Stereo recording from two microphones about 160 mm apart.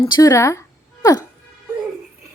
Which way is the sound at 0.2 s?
20° left (ahead or behind).